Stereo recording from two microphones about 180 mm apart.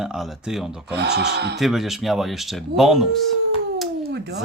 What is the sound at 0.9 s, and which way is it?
Speech, 65° right (ahead or behind).